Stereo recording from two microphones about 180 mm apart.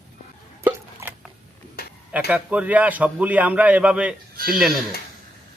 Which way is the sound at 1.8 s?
55° left (ahead or behind).